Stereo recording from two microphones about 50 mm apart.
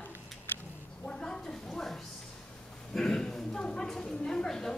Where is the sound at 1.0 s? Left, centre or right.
Centre.